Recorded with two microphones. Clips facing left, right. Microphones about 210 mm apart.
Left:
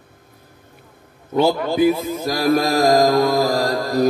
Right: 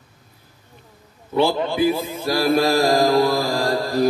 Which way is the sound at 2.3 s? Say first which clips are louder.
Even; 30° right (ahead or behind).